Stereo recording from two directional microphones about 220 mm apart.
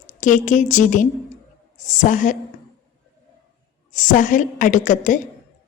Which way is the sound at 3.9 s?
35° left (ahead or behind).